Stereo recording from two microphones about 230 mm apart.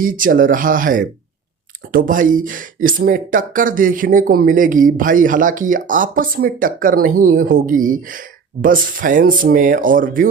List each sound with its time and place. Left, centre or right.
0.0 s speech: right